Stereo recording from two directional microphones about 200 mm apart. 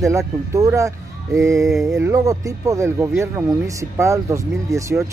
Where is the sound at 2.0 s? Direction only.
15° right (ahead or behind).